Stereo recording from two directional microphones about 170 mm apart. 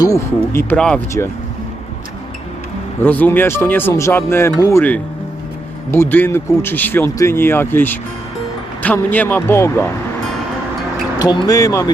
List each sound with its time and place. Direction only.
0.0 s speech: 15° left (ahead or behind)
3.0 s speech: 10° left (ahead or behind)
11.2 s speech: 25° left (ahead or behind)